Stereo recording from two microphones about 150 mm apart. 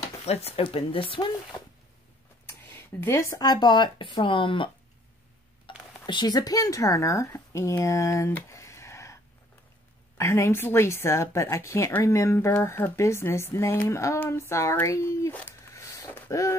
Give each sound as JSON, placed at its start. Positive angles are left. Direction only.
{"t": 0.2, "sound": "speech", "side_deg": 45}
{"t": 2.4, "sound": "speech", "side_deg": 15}
{"t": 5.7, "sound": "a sound", "side_deg": 30}
{"t": 6.0, "sound": "a woman's voice", "side_deg": 30}